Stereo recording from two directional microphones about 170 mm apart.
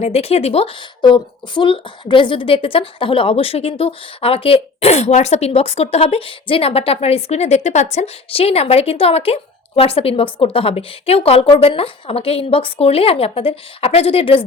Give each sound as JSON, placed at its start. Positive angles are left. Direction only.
{"t": 0.0, "sound": "a woman's voice", "side_deg": 35}